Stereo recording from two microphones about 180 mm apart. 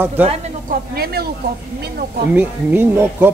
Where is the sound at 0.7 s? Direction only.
60° right (ahead or behind).